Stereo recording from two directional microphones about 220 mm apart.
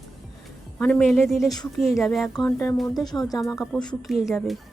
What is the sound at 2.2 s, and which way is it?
A woman's voice, 15° left (ahead or behind).